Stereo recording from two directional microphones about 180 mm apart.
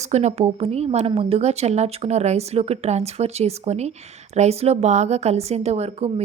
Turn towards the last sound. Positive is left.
turn(degrees=-35)  # may be behind; listen again after turning